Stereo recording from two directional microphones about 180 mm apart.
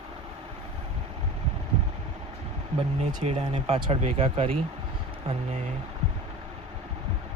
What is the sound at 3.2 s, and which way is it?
Speech, 35° right (ahead or behind).